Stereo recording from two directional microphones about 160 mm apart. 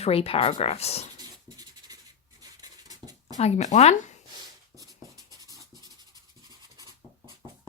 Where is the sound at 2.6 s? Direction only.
25° right (ahead or behind).